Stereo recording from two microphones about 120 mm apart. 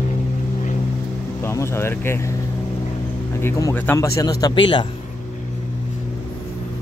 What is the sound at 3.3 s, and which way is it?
Speech, 25° left (ahead or behind).